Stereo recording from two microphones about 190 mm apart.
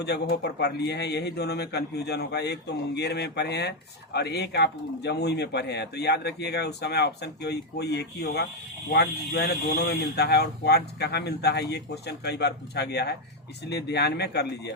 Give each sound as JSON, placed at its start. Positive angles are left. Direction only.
{"t": 0.0, "sound": "speech", "side_deg": 60}